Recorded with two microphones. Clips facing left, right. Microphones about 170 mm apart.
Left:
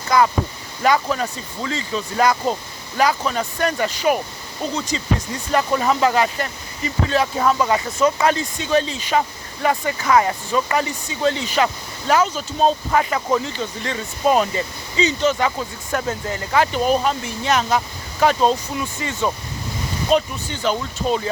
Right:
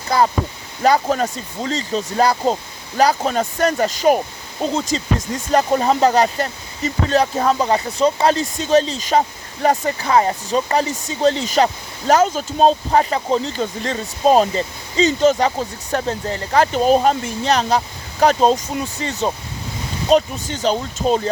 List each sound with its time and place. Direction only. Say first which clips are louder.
0.1 s speech: even; 30° right (ahead or behind)